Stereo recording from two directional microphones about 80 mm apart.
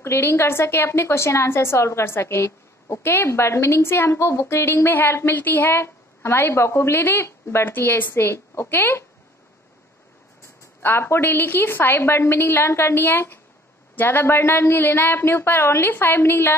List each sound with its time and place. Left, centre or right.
0.0 s a woman's voice: left
10.8 s a woman's voice: left